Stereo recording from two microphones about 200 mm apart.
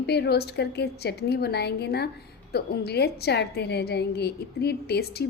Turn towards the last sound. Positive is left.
turn(degrees=55)  # may be behind; listen again after turning